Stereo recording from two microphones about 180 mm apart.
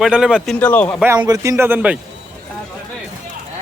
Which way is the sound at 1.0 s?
10° right (ahead or behind).